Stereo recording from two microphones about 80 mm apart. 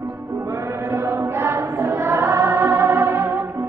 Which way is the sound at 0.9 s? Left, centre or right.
Right.